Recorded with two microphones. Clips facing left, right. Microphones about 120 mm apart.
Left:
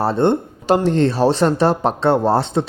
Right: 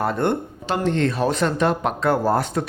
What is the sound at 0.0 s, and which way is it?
Speech, 30° left (ahead or behind).